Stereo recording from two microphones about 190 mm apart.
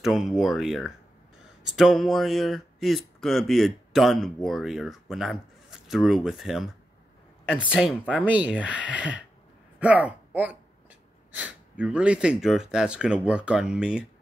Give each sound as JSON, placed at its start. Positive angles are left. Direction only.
{"t": 0.0, "sound": "speech", "side_deg": 0}
{"t": 8.3, "sound": "speech", "side_deg": -5}